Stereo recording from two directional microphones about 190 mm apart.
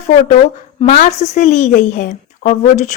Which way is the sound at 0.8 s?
40° left (ahead or behind).